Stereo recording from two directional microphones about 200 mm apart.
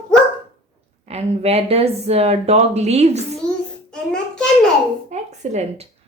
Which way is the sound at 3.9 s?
5° left (ahead or behind).